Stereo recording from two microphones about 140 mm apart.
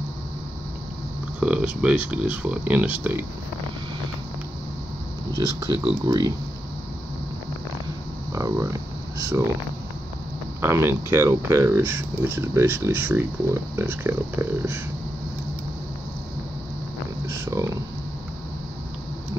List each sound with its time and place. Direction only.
1.4 s speech: 10° right (ahead or behind)
6.0 s speech: 25° right (ahead or behind)
8.3 s speech: 25° right (ahead or behind)
10.6 s speech: 15° right (ahead or behind)
17.3 s speech: 20° right (ahead or behind)